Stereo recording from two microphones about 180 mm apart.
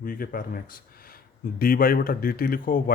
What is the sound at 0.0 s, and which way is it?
Speech, 55° left (ahead or behind).